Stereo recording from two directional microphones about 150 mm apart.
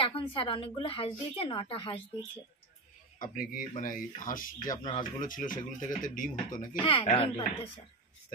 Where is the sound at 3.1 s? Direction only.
65° left (ahead or behind).